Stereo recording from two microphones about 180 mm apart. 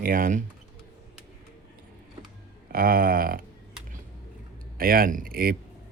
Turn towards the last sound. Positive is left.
turn(degrees=-55)  # may be behind; listen again after turning